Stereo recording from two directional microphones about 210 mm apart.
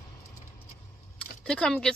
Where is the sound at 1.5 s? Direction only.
5° left (ahead or behind).